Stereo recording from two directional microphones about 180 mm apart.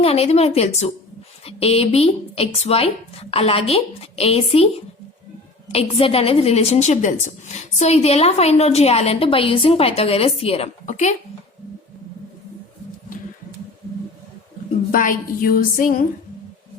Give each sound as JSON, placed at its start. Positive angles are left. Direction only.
{"t": 0.0, "sound": "a woman's voice", "side_deg": 35}
{"t": 5.7, "sound": "a woman's voice", "side_deg": 30}
{"t": 14.9, "sound": "a woman's voice", "side_deg": 50}